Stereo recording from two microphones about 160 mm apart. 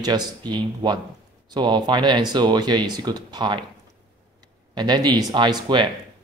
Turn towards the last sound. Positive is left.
turn(degrees=-30)  # may be behind; listen again after turning